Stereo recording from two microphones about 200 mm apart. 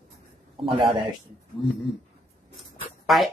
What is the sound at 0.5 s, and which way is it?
Speech, 25° right (ahead or behind).